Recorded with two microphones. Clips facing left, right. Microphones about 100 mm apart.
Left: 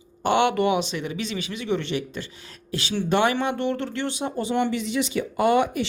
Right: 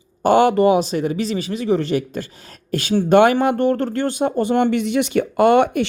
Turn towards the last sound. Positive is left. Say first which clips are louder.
# right 6 dB
turn(degrees=-60)  # may be behind; listen again after turning